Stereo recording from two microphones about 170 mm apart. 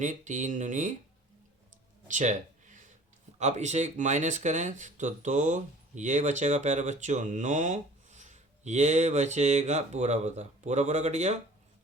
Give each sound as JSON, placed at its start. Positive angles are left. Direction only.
{"t": 0.0, "sound": "speech", "side_deg": -45}
{"t": 2.0, "sound": "a sound", "side_deg": -45}
{"t": 3.3, "sound": "speech", "side_deg": -45}